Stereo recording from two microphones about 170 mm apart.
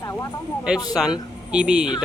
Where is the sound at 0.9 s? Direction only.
5° right (ahead or behind).